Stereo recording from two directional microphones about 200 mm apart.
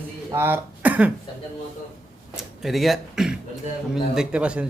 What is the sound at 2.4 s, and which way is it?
A man's voice, centre (ahead or behind).